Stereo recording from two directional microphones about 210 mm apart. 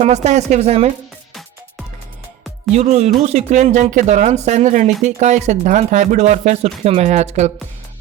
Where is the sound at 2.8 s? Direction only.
30° right (ahead or behind).